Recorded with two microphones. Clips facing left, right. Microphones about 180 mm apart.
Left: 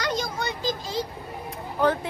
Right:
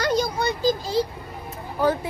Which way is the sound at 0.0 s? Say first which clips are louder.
Right 6 dB; 40° right (ahead or behind).